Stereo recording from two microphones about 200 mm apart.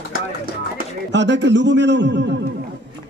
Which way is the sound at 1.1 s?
65° right (ahead or behind).